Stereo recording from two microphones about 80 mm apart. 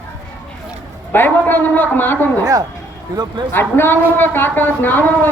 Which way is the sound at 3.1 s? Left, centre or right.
Right.